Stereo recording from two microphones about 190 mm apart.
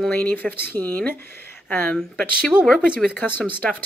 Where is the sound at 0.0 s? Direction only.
10° left (ahead or behind).